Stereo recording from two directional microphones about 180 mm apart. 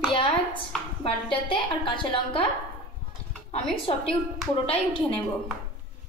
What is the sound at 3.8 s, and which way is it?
Speech, 30° left (ahead or behind).